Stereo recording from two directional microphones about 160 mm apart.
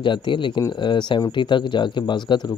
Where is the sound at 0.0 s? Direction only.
30° left (ahead or behind).